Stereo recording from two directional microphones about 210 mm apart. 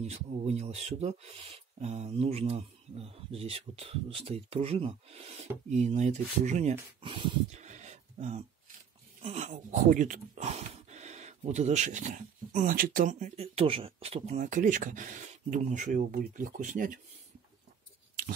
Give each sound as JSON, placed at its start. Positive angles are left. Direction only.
{"t": 0.0, "sound": "speech", "side_deg": -30}